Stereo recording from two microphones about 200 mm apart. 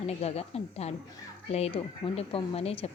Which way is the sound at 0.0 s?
30° left (ahead or behind).